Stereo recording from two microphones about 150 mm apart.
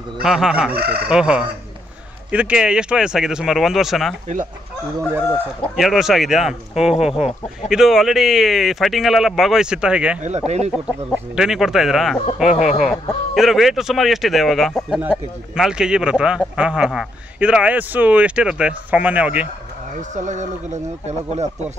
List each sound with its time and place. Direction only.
0.2 s speech: 5° right (ahead or behind)
0.7 s fowl: 90° right
1.0 s speech: 5° right (ahead or behind)
5.8 s speech: centre (ahead or behind)
10.2 s speech: 45° right (ahead or behind)
11.3 s speech: 5° right (ahead or behind)
20.0 s speech: 55° right (ahead or behind)